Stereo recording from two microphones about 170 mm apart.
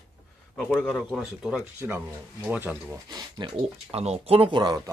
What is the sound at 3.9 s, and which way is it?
Speech, 40° right (ahead or behind).